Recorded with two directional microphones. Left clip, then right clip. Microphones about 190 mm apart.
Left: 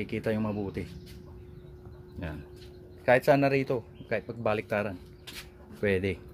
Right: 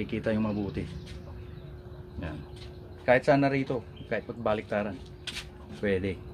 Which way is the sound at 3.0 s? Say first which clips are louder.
Even; 45° left (ahead or behind).